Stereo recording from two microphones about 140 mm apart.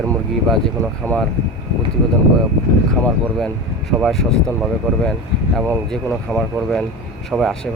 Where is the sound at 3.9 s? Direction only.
Centre (ahead or behind).